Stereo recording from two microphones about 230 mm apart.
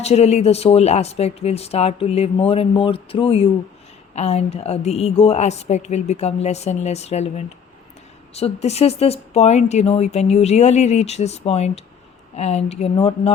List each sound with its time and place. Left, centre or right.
0.0 s speech: left